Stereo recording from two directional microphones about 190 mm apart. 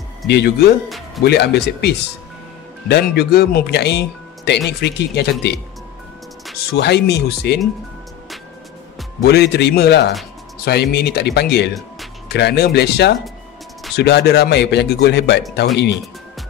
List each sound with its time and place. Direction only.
0.3 s speech: 60° left (ahead or behind)
0.8 s music: centre (ahead or behind)
1.2 s speech: 60° left (ahead or behind)
6.7 s speech: 60° left (ahead or behind)
9.2 s speech: 60° left (ahead or behind)